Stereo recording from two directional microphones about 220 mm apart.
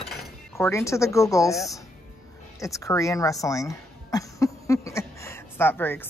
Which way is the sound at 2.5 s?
15° left (ahead or behind).